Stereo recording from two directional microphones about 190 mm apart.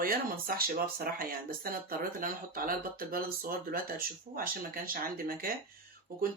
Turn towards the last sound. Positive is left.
turn(degrees=-50)  # may be behind; listen again after turning